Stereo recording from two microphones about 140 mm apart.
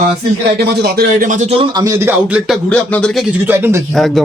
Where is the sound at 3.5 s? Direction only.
15° right (ahead or behind).